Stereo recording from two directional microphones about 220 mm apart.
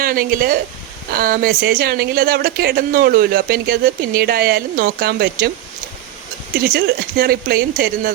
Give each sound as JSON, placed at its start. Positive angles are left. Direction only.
{"t": 0.0, "sound": "speech", "side_deg": -40}
{"t": 6.7, "sound": "speech", "side_deg": -45}